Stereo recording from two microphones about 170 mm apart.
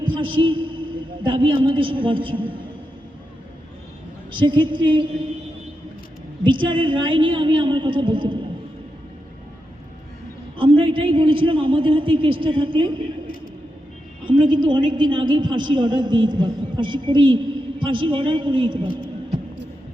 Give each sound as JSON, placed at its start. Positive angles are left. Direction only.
{"t": 0.0, "sound": "a man's voice", "side_deg": -30}
{"t": 4.3, "sound": "a woman's voice", "side_deg": -30}
{"t": 6.4, "sound": "a woman's voice", "side_deg": -30}
{"t": 10.6, "sound": "a man's voice", "side_deg": -30}
{"t": 14.3, "sound": "a woman's voice", "side_deg": -30}